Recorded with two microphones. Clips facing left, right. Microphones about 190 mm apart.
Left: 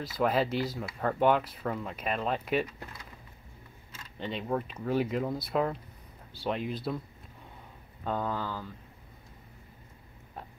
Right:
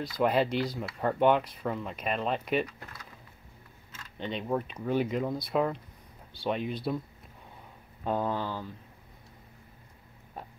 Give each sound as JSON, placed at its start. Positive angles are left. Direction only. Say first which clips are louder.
{"t": 0.0, "sound": "speech", "louder": "right 1 dB", "side_deg": 5}
{"t": 4.2, "sound": "speech", "louder": "right 1 dB", "side_deg": 0}
{"t": 8.2, "sound": "speech", "louder": "right 2 dB", "side_deg": -25}